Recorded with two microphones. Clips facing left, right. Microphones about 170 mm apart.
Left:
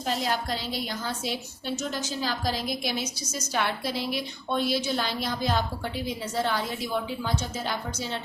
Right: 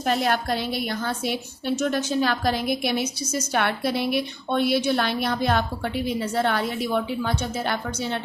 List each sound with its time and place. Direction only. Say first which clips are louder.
0.0 s a woman's voice: right 5 dB; 60° right (ahead or behind)